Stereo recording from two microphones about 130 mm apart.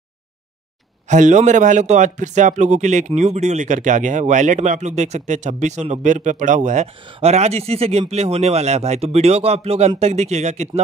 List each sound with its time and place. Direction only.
1.0 s a man's voice: 70° right (ahead or behind)
7.2 s speech: 55° right (ahead or behind)